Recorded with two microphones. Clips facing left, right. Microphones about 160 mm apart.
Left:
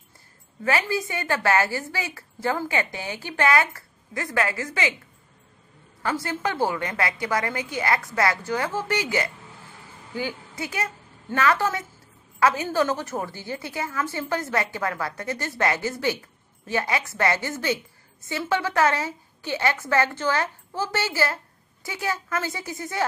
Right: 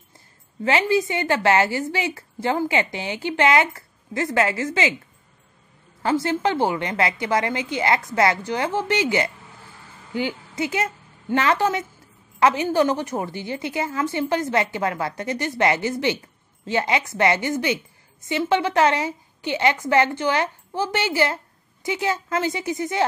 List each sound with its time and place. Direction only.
0.7 s a woman's voice: 25° right (ahead or behind)
6.0 s a woman's voice: 25° right (ahead or behind)